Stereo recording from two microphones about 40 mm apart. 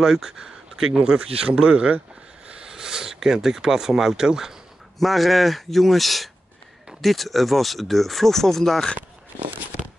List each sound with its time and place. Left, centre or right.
0.0 s speech: centre
4.9 s speech: centre